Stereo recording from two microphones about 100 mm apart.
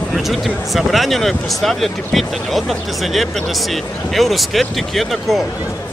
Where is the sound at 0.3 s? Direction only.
Centre (ahead or behind).